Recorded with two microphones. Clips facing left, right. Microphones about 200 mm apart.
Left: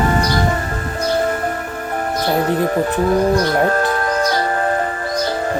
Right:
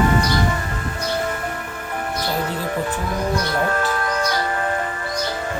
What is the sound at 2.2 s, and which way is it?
Music, 55° left (ahead or behind).